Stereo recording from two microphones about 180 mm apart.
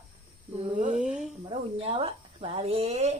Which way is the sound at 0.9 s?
5° right (ahead or behind).